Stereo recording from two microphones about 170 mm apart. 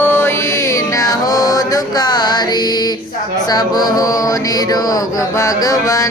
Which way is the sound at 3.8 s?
20° left (ahead or behind).